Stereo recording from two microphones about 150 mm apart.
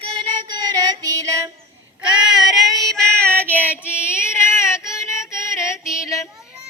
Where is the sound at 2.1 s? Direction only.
5° right (ahead or behind).